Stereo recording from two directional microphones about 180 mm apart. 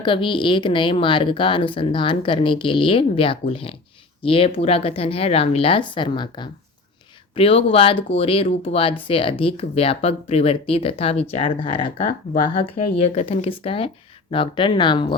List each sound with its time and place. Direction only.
0.0 s speech: 25° left (ahead or behind)